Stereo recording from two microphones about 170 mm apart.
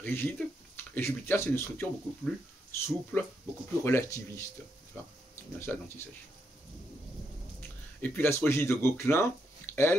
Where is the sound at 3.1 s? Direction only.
10° left (ahead or behind).